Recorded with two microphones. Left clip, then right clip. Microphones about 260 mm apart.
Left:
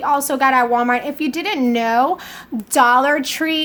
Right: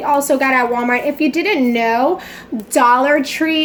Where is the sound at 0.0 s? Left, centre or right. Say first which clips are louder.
Right 2 dB; left.